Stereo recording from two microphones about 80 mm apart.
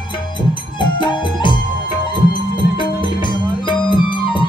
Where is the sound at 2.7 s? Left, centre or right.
Left.